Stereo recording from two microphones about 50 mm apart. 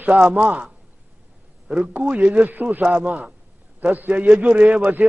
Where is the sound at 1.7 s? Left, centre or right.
Right.